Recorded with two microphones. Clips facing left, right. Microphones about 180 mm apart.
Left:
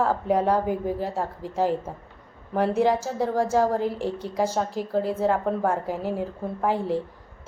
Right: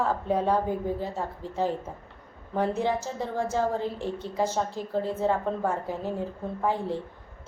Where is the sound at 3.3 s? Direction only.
90° left.